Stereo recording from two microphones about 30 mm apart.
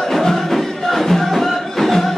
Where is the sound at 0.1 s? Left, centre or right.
Centre.